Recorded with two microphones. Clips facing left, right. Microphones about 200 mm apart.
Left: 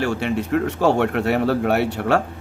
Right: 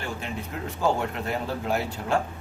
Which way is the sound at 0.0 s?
75° left (ahead or behind).